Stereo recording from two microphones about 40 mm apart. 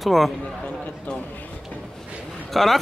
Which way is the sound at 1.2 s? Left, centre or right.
Left.